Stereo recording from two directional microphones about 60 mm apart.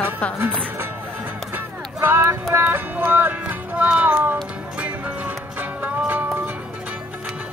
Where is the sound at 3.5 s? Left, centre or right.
Right.